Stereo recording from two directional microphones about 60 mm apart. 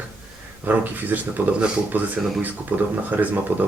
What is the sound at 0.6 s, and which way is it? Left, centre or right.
Speech, right.